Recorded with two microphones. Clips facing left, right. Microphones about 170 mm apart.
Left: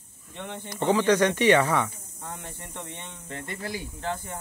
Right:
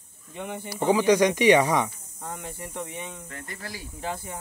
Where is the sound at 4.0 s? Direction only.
10° right (ahead or behind).